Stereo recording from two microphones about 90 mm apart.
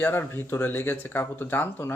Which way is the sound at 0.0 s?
25° left (ahead or behind).